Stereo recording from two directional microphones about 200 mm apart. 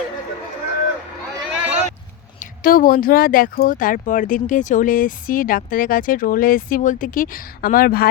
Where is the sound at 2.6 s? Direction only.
45° left (ahead or behind).